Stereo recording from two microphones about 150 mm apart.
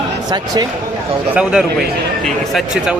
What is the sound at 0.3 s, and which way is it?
Speech, 25° right (ahead or behind).